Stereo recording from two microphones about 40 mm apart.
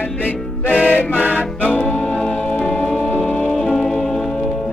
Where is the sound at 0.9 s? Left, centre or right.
Left.